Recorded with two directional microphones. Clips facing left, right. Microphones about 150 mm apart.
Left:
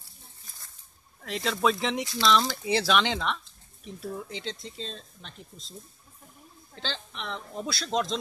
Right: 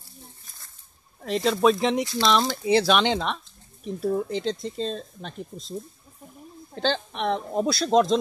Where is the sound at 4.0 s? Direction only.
40° right (ahead or behind).